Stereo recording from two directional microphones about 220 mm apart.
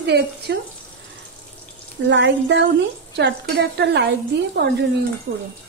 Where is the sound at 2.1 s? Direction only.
55° right (ahead or behind).